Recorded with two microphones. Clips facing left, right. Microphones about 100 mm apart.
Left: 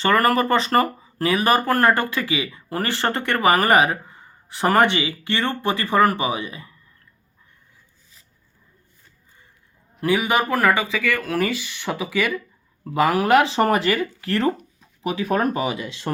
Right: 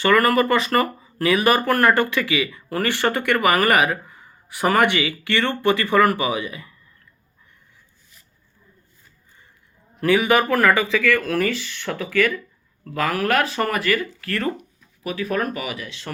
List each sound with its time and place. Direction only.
0.0 s speech: 30° left (ahead or behind)
3.4 s speech: 30° left (ahead or behind)
4.9 s speech: 25° left (ahead or behind)
10.0 s speech: 15° left (ahead or behind)